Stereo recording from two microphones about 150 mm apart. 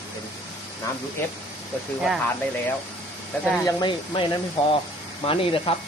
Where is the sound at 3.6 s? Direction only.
30° left (ahead or behind).